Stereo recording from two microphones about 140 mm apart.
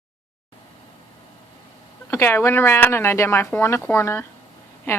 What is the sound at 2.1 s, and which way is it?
Speech, 20° left (ahead or behind).